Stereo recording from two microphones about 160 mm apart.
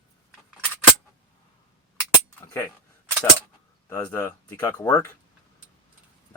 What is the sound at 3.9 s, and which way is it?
Speech, 20° left (ahead or behind).